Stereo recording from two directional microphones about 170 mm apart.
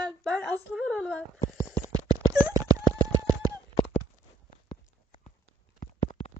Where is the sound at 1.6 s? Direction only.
20° right (ahead or behind).